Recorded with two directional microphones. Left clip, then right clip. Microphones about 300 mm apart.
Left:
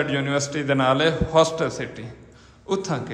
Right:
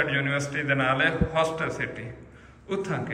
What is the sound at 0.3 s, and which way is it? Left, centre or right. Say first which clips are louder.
A man's voice: left 3 dB; centre.